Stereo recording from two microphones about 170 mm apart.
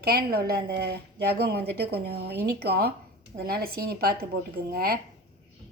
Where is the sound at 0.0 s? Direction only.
65° right (ahead or behind).